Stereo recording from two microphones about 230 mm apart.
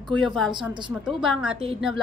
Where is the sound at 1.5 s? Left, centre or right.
Right.